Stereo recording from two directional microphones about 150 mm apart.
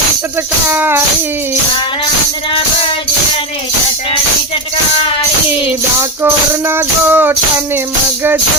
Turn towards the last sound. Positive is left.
turn(degrees=-15)  # may be behind; listen again after turning